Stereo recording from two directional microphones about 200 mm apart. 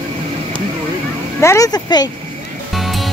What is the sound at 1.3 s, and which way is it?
Speech, 15° left (ahead or behind).